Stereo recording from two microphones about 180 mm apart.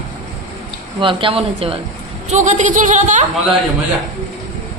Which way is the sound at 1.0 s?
30° right (ahead or behind).